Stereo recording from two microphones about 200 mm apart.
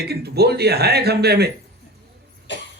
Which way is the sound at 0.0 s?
55° right (ahead or behind).